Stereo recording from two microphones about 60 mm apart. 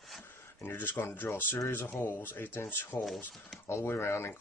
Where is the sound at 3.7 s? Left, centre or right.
Left.